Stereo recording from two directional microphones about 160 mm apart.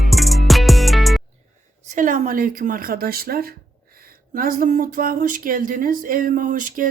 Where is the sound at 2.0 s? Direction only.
55° right (ahead or behind); by 3.4 s 70° right (ahead or behind).